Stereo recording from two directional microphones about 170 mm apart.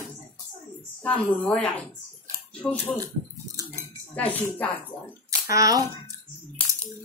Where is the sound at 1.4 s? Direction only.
10° left (ahead or behind).